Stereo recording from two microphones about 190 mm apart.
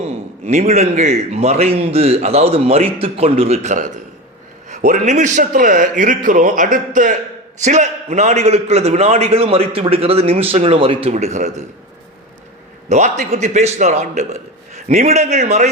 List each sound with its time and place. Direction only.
0.0 s a man's voice: 35° right (ahead or behind)
12.9 s a man's voice: 35° right (ahead or behind)